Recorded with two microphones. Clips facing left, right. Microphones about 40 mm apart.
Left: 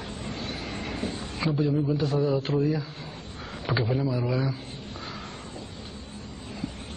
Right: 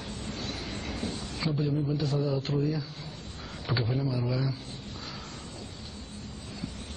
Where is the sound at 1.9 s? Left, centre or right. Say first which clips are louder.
Left 4 dB; left.